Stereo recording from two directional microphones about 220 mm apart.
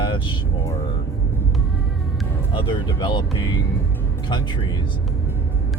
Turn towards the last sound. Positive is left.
turn(degrees=20)  # may be behind; listen again after turning